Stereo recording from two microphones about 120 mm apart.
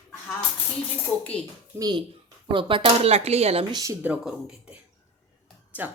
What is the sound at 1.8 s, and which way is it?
A child's voice, 35° right (ahead or behind).